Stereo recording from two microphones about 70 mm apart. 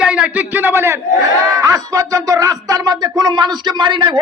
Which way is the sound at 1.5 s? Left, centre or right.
Right.